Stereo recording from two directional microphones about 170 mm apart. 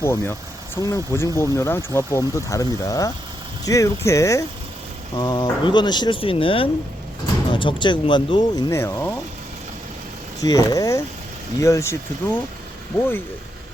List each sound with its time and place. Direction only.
0.0 s speech: 15° left (ahead or behind)
10.4 s speech: 20° left (ahead or behind)